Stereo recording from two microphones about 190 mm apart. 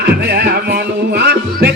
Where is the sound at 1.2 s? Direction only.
60° right (ahead or behind).